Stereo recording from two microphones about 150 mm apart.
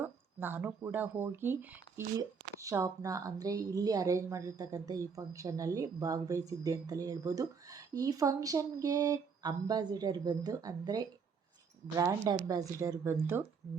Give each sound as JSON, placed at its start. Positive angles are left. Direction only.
{"t": 0.0, "sound": "speech", "side_deg": -15}